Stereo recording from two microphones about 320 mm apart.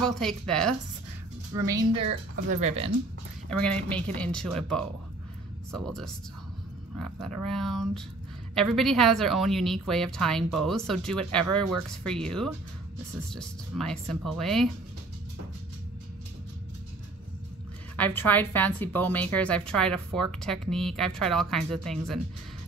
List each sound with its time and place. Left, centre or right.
0.0 s a woman's voice: centre
1.5 s a woman's voice: centre
3.4 s a woman's voice: centre
8.5 s a woman's voice: centre
17.9 s a woman's voice: centre